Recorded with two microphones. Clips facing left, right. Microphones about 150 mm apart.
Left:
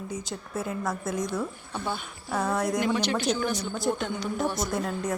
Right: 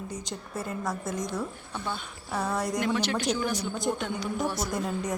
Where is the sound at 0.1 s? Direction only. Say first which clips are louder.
Left 2 dB; 5° left (ahead or behind); by 3.8 s 10° right (ahead or behind).